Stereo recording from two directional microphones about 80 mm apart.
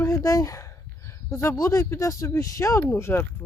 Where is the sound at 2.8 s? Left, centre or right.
Left.